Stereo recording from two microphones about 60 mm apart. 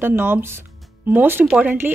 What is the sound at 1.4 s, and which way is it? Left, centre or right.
Speech, centre.